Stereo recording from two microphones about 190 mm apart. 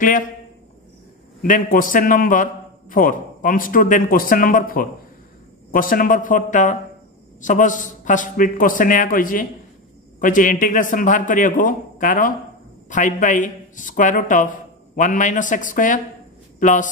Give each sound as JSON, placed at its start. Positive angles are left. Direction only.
{"t": 1.4, "sound": "a man's voice", "side_deg": 45}